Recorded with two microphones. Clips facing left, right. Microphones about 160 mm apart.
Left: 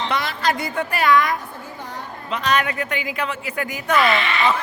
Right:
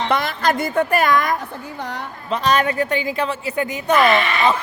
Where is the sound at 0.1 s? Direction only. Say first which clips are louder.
Right 4 dB; 50° right (ahead or behind).